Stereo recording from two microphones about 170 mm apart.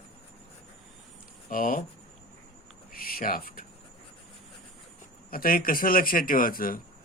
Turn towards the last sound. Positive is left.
turn(degrees=55)  # may be behind; listen again after turning